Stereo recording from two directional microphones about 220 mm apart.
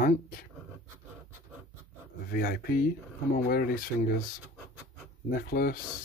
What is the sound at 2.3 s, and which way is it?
Speech, 40° left (ahead or behind).